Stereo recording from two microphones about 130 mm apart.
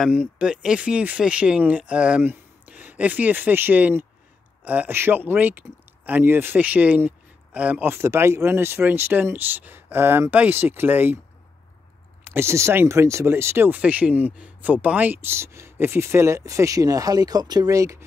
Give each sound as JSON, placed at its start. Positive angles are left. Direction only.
{"t": 0.0, "sound": "speech", "side_deg": -10}
{"t": 12.3, "sound": "speech", "side_deg": -20}